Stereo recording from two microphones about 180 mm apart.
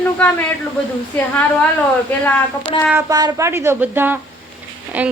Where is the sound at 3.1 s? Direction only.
20° right (ahead or behind).